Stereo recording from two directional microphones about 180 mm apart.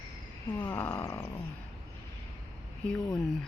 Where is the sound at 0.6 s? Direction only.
10° left (ahead or behind).